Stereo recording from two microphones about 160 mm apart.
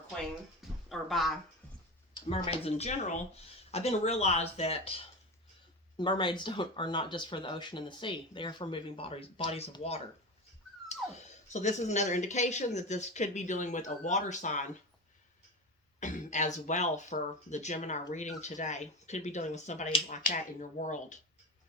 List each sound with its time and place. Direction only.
0.9 s speech: centre (ahead or behind)
2.3 s speech: 40° left (ahead or behind)
11.1 s speech: 45° left (ahead or behind)
16.0 s speech: 50° left (ahead or behind)